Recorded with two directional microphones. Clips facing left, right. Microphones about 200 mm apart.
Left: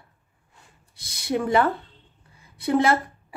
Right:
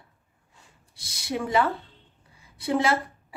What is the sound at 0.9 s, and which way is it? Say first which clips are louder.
A woman's voice: left 5 dB; 55° left (ahead or behind).